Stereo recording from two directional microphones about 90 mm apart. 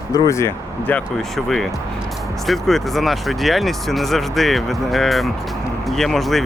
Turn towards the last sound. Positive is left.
turn(degrees=0)  # may be behind; listen again after turning